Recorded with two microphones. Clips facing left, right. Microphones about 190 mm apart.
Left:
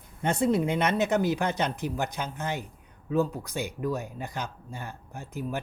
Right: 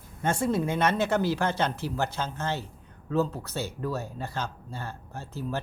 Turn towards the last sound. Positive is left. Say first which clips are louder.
# even
turn(degrees=15)  # may be behind; listen again after turning